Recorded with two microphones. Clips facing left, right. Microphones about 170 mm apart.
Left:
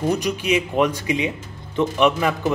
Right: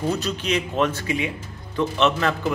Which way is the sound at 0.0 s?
15° left (ahead or behind).